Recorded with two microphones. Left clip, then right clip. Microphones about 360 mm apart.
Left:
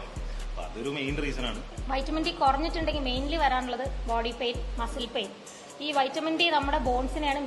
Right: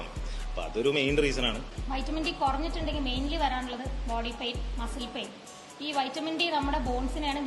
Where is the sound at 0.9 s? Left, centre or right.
Right.